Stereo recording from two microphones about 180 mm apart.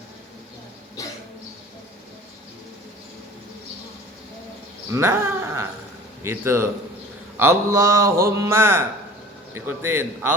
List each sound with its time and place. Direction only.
4.9 s a man's voice: 15° right (ahead or behind)